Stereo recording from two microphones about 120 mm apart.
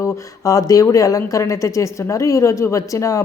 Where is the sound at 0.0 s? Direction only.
30° left (ahead or behind).